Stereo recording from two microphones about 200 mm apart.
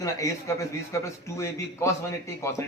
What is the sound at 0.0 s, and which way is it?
A man's voice, 15° left (ahead or behind).